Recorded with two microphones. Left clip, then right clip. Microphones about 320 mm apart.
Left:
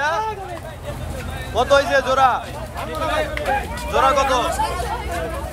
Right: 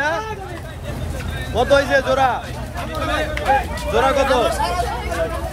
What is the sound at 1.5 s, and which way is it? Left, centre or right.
Speech, centre.